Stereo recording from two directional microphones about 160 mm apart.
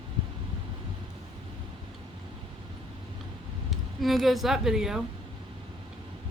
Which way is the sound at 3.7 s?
Centre (ahead or behind).